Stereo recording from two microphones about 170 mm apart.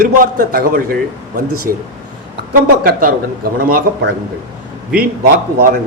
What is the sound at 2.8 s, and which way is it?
A man's voice, 60° right (ahead or behind).